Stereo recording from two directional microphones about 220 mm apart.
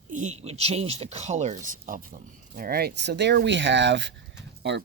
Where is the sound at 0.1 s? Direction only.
35° right (ahead or behind).